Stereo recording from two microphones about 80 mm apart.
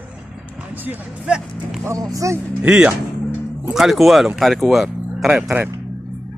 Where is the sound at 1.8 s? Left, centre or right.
Right.